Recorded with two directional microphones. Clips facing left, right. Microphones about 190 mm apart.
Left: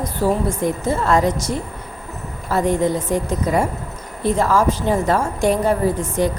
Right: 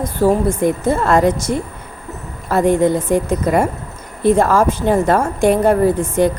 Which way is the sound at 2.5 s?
55° right (ahead or behind).